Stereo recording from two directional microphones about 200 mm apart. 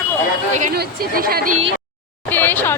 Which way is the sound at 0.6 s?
40° right (ahead or behind).